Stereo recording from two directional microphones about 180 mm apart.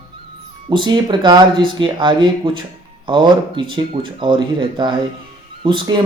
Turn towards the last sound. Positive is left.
turn(degrees=-25)  # may be behind; listen again after turning